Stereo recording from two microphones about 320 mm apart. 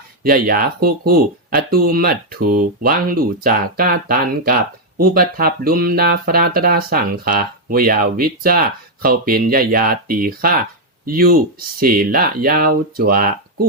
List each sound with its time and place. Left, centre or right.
0.2 s speech: right